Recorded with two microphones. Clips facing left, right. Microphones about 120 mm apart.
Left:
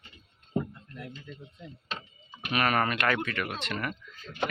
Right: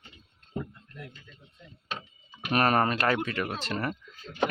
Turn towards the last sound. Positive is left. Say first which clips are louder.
# right 3 dB
turn(degrees=-35)  # may be behind; listen again after turning